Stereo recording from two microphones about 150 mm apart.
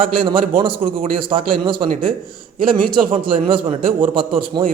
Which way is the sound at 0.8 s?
55° right (ahead or behind).